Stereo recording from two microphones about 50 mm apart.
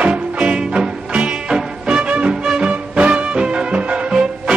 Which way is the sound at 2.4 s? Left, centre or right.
Centre.